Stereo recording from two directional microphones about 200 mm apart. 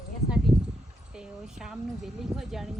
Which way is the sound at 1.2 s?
5° right (ahead or behind).